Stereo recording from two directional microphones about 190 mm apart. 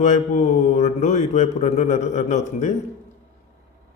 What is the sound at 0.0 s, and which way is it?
Speech, 40° left (ahead or behind).